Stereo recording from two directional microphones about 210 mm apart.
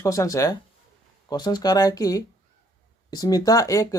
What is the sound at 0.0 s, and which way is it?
Speech, 15° left (ahead or behind).